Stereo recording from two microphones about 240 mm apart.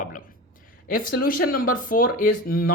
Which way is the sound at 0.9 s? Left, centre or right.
Left.